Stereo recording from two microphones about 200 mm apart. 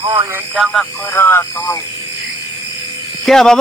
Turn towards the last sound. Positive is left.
turn(degrees=0)  # may be behind; listen again after turning